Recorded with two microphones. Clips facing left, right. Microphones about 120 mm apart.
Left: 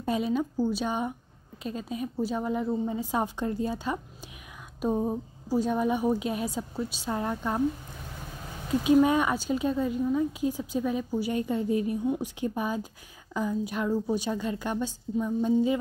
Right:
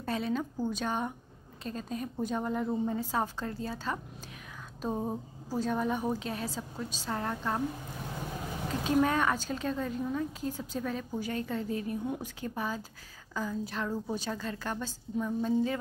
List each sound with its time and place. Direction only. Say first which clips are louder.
0.0 s a woman's voice: left 5 dB; 10° left (ahead or behind)
8.8 s a woman's voice: left 5 dB; 10° left (ahead or behind)